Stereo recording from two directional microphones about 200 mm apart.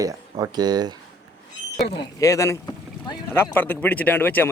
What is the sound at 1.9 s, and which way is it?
Speech, 20° left (ahead or behind).